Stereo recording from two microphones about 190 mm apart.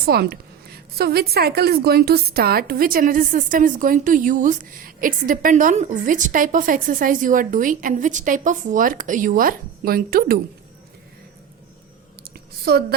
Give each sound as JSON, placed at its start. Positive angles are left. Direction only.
{"t": 0.0, "sound": "a woman's voice", "side_deg": -55}
{"t": 12.7, "sound": "a woman's voice", "side_deg": -55}